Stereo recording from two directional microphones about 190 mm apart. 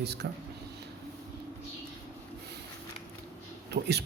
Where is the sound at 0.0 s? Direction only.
60° right (ahead or behind).